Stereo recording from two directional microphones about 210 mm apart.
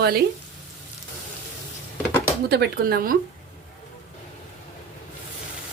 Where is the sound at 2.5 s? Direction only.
50° right (ahead or behind).